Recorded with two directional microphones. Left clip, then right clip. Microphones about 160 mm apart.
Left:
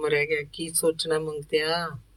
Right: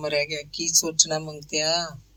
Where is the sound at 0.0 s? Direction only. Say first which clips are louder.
Left 2 dB; 40° right (ahead or behind).